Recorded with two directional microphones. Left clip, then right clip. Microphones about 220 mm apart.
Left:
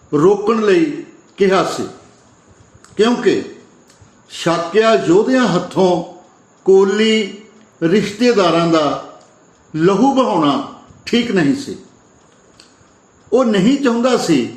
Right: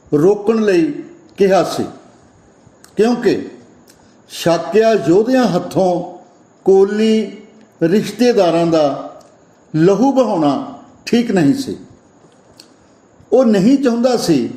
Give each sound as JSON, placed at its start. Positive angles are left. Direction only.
{"t": 0.1, "sound": "speech", "side_deg": -35}
{"t": 2.9, "sound": "a man's voice", "side_deg": -35}
{"t": 13.3, "sound": "speech", "side_deg": -35}